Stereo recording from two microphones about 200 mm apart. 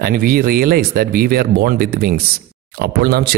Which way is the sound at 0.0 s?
50° right (ahead or behind).